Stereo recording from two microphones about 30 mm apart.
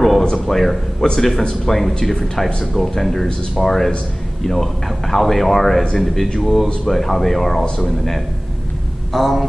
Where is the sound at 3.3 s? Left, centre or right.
Left.